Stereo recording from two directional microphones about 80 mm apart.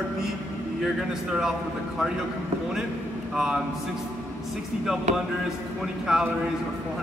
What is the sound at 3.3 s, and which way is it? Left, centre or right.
Speech, centre.